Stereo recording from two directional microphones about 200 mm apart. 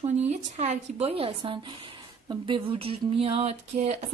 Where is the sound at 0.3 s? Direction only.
35° right (ahead or behind).